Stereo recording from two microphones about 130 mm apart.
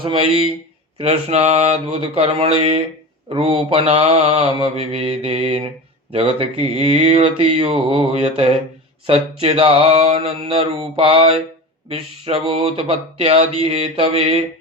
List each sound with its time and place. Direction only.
0.0 s mantra: 45° right (ahead or behind)